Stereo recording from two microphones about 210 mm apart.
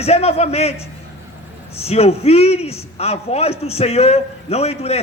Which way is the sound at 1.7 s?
30° left (ahead or behind).